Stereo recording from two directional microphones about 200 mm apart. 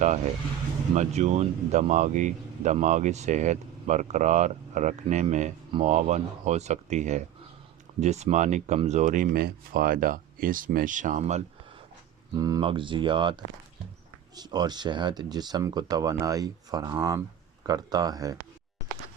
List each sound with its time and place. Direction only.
0.9 s speech: 35° right (ahead or behind)
12.3 s speech: 20° right (ahead or behind)